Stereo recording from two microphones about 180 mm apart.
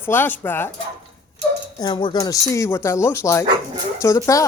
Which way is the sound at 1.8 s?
25° left (ahead or behind).